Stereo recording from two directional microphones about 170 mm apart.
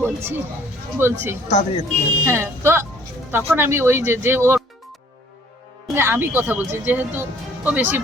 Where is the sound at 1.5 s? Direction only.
45° left (ahead or behind).